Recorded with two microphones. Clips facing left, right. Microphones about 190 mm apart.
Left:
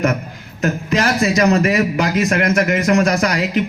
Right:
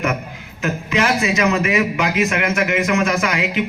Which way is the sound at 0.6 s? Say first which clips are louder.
Left 2 dB; 40° left (ahead or behind).